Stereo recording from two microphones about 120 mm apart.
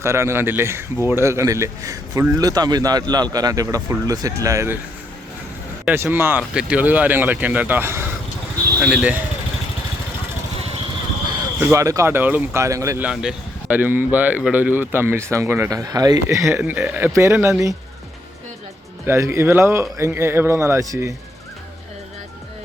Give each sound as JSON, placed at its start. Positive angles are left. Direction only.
{"t": 0.0, "sound": "a man's voice", "side_deg": -25}
{"t": 5.8, "sound": "speech", "side_deg": -15}
{"t": 11.6, "sound": "speech", "side_deg": -25}
{"t": 13.0, "sound": "speech", "side_deg": -10}
{"t": 17.1, "sound": "speech", "side_deg": -25}
{"t": 19.0, "sound": "speech", "side_deg": -25}